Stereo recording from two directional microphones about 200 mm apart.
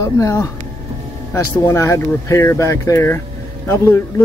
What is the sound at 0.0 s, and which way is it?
Speech, 15° left (ahead or behind).